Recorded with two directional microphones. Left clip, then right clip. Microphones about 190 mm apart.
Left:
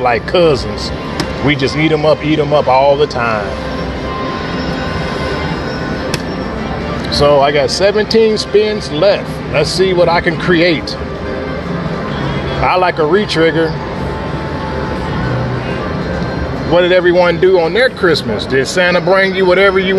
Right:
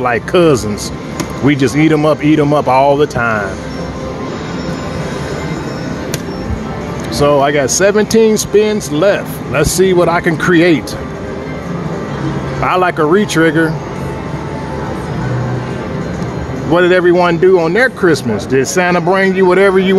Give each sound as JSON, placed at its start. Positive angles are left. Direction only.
{"t": 0.0, "sound": "speech", "side_deg": -45}
{"t": 7.2, "sound": "speech", "side_deg": -40}
{"t": 12.6, "sound": "speech", "side_deg": -45}
{"t": 16.7, "sound": "a man's voice", "side_deg": -40}
{"t": 19.4, "sound": "speech", "side_deg": -45}